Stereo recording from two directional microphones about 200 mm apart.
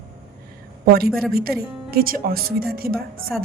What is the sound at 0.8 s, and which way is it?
A woman's voice, 50° right (ahead or behind).